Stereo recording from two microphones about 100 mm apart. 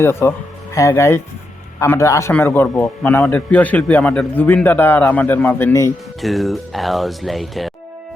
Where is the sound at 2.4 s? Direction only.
20° left (ahead or behind).